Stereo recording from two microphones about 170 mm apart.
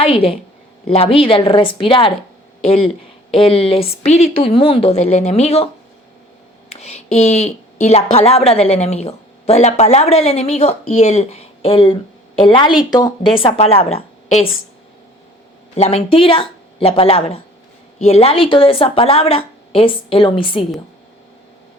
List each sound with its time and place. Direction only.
0.0 s a woman's voice: 35° left (ahead or behind)
6.7 s a woman's voice: 40° left (ahead or behind)
15.7 s a woman's voice: 35° left (ahead or behind)